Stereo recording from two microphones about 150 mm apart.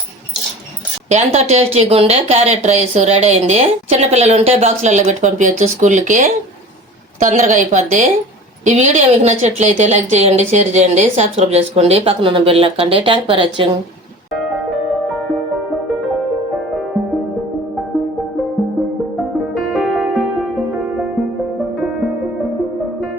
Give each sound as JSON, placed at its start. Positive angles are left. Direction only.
{"t": 1.1, "sound": "a woman's voice", "side_deg": -45}
{"t": 19.7, "sound": "music", "side_deg": 0}